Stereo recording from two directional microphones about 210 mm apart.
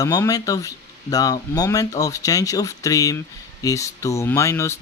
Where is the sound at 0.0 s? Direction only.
15° left (ahead or behind).